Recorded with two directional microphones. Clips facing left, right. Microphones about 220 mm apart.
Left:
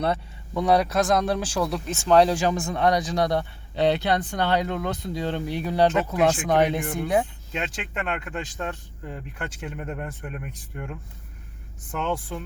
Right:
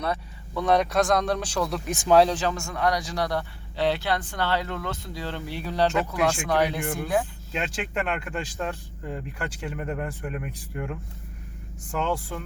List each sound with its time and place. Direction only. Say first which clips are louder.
0.5 s speech: left 1 dB; 10° left (ahead or behind)
1.9 s speech: right 2 dB; 15° right (ahead or behind)
2.3 s a man's voice: left 4 dB; 15° left (ahead or behind)
7.5 s speech: right 2 dB; centre (ahead or behind)